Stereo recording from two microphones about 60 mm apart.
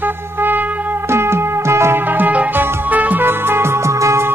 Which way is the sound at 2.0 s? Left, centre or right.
Right.